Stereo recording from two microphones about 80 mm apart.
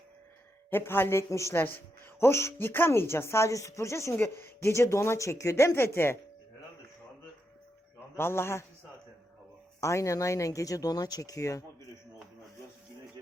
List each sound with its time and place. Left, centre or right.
0.7 s speech: left
7.9 s a man's voice: left
9.8 s speech: left